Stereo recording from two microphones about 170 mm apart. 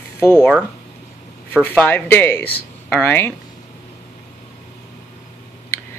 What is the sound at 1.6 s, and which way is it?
Speech, 10° left (ahead or behind).